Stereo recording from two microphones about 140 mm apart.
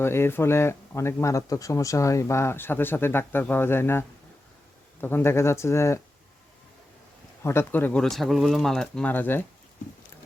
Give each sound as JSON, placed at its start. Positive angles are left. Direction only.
{"t": 0.0, "sound": "a man's voice", "side_deg": 15}
{"t": 7.4, "sound": "a man's voice", "side_deg": 15}
{"t": 8.1, "sound": "speech", "side_deg": 0}